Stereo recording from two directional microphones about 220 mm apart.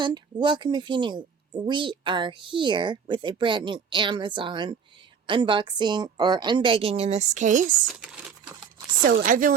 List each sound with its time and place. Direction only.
0.0 s speech: 20° right (ahead or behind)
7.9 s crumpling: 5° right (ahead or behind)
9.0 s speech: 40° right (ahead or behind)